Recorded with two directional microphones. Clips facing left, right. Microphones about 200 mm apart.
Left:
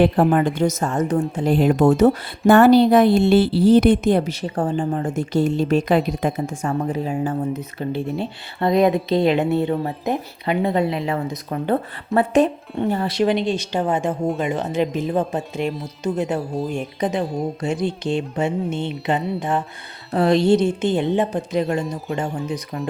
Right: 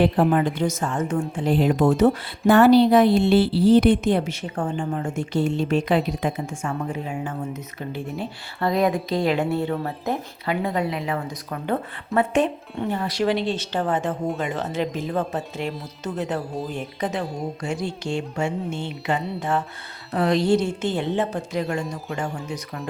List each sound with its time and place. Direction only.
0.0 s speech: 50° left (ahead or behind)
13.1 s speech: 20° left (ahead or behind)
20.1 s speech: 30° left (ahead or behind)